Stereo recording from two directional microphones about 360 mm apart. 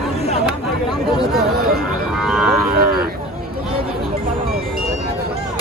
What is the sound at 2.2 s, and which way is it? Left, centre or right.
Speech, centre.